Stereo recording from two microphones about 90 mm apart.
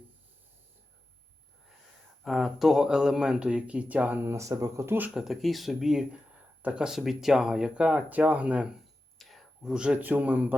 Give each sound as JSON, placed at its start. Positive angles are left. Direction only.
{"t": 2.2, "sound": "speech", "side_deg": 0}
{"t": 5.1, "sound": "speech", "side_deg": 0}
{"t": 9.1, "sound": "whispering", "side_deg": 0}
{"t": 9.7, "sound": "a man's voice", "side_deg": -10}